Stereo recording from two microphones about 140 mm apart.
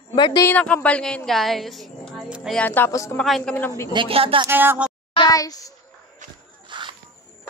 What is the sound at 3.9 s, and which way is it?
Speech, 40° right (ahead or behind).